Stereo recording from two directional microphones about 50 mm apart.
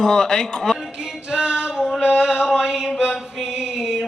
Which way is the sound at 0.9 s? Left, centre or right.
Centre.